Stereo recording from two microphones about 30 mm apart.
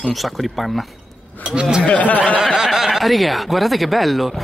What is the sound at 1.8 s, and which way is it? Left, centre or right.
Speech, left.